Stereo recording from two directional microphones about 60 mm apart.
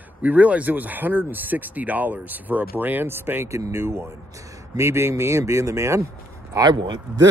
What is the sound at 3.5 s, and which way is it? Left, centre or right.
Speech, right.